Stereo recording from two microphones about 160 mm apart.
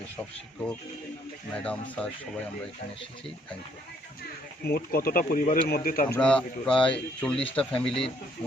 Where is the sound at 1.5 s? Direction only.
10° left (ahead or behind).